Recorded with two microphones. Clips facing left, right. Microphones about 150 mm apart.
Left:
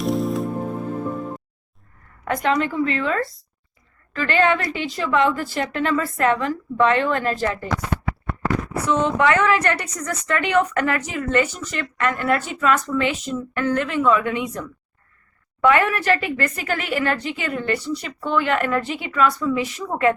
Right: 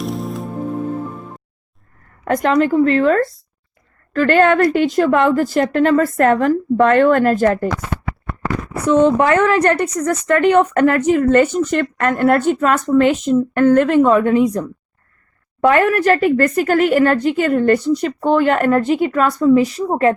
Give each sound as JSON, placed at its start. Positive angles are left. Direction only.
{"t": 0.0, "sound": "music", "side_deg": 0}
{"t": 2.2, "sound": "speech", "side_deg": -45}
{"t": 8.9, "sound": "speech", "side_deg": -40}